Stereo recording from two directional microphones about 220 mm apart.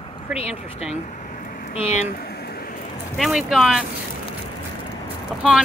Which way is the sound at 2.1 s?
45° left (ahead or behind).